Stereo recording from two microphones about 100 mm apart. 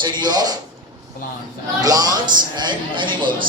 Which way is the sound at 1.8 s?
40° right (ahead or behind).